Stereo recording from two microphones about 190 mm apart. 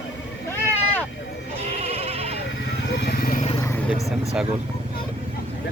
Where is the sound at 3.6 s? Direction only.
15° left (ahead or behind).